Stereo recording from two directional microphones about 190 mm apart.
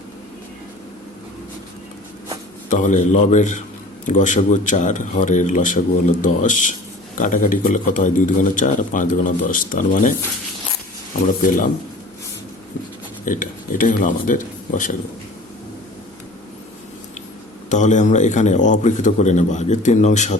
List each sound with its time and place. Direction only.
2.6 s a man's voice: 40° left (ahead or behind)
11.4 s a man's voice: 45° left (ahead or behind)
13.2 s speech: 45° left (ahead or behind)
17.7 s speech: 40° left (ahead or behind)